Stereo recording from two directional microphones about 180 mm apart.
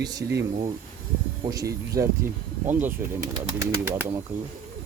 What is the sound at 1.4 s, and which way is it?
Speech, 20° right (ahead or behind).